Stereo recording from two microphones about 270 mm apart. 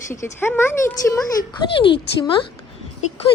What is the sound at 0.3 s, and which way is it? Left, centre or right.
A woman's voice, centre.